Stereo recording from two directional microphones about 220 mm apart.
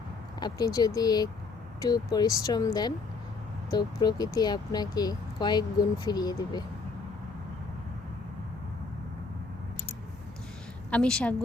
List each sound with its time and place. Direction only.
0.3 s speech: 20° left (ahead or behind)
10.9 s a woman's voice: 5° left (ahead or behind)